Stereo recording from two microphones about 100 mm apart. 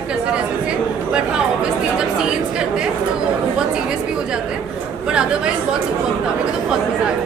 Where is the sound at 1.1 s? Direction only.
10° right (ahead or behind).